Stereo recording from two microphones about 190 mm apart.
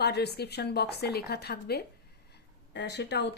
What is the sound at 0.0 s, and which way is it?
A woman's voice, 60° left (ahead or behind).